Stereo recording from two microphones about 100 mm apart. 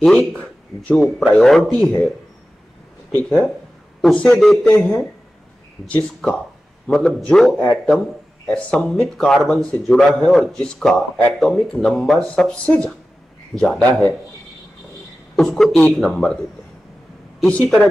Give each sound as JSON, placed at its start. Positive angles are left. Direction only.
{"t": 0.3, "sound": "speech", "side_deg": 10}
{"t": 1.8, "sound": "a man's voice", "side_deg": 15}
{"t": 3.2, "sound": "a man's voice", "side_deg": 15}
{"t": 5.9, "sound": "a man's voice", "side_deg": 10}
{"t": 6.9, "sound": "a man's voice", "side_deg": 0}
{"t": 15.3, "sound": "a man's voice", "side_deg": 5}
{"t": 17.4, "sound": "a man's voice", "side_deg": 10}